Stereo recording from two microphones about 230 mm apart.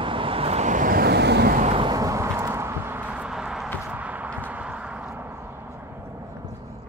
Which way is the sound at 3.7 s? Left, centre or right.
Centre.